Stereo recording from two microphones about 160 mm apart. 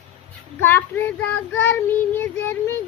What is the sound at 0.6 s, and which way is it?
Child singing, 10° left (ahead or behind).